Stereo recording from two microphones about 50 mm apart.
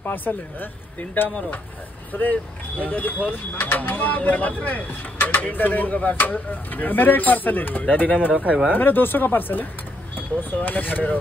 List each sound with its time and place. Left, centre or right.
0.0 s speech: left
2.8 s speech: left